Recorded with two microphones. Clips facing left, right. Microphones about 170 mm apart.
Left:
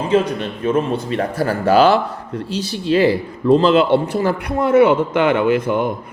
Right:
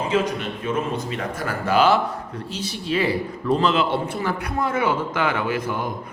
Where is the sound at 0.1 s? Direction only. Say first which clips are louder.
Left 8 dB; 30° left (ahead or behind).